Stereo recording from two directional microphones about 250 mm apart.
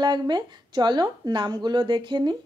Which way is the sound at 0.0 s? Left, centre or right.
Centre.